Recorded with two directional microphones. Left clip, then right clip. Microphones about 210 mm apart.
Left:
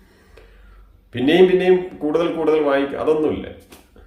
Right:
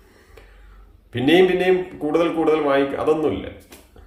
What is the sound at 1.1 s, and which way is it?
A man's voice, 5° left (ahead or behind).